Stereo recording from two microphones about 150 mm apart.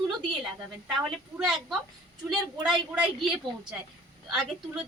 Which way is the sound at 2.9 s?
5° right (ahead or behind).